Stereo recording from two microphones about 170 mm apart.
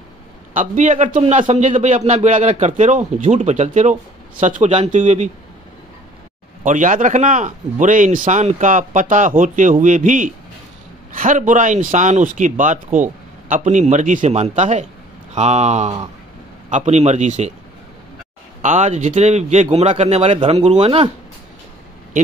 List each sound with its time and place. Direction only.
0.6 s a man's voice: 45° right (ahead or behind)
6.6 s a man's voice: 50° right (ahead or behind)
18.6 s speech: 45° right (ahead or behind)